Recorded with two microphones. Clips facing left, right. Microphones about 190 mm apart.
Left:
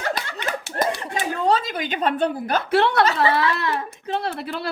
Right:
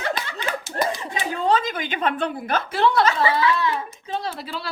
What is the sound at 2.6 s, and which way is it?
Speech, 65° left (ahead or behind).